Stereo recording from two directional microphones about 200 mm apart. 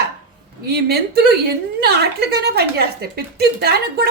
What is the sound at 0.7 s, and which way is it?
A woman's voice, 55° right (ahead or behind).